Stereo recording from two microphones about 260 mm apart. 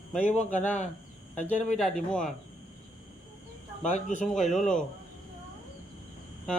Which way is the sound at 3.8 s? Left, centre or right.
Left.